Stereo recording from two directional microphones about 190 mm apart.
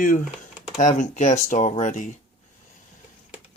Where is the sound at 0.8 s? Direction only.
40° left (ahead or behind).